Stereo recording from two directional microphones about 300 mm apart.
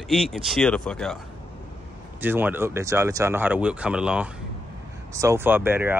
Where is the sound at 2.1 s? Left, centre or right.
Centre.